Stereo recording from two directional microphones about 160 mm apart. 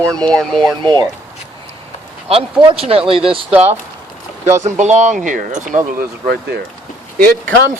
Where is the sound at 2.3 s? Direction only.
35° right (ahead or behind).